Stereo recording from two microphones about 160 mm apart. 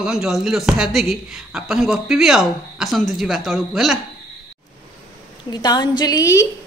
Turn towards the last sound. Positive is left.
turn(degrees=20)  # may be behind; listen again after turning